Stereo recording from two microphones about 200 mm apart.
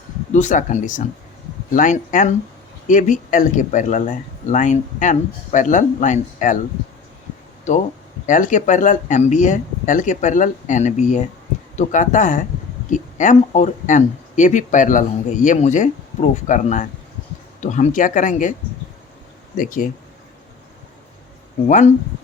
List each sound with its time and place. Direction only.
0.3 s speech: 35° left (ahead or behind)
7.7 s speech: 35° left (ahead or behind)
19.5 s speech: 45° left (ahead or behind)